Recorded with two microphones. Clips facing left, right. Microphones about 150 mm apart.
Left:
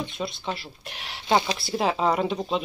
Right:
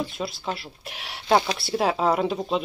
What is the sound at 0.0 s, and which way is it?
Speech, 5° right (ahead or behind).